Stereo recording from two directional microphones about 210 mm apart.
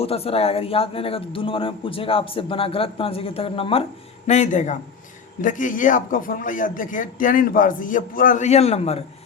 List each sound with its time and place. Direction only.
0.0 s a man's voice: 30° left (ahead or behind)